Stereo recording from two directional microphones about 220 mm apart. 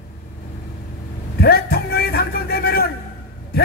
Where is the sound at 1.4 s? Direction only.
45° left (ahead or behind).